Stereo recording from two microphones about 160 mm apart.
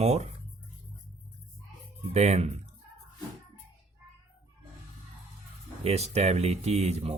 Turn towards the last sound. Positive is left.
turn(degrees=-40)  # may be behind; listen again after turning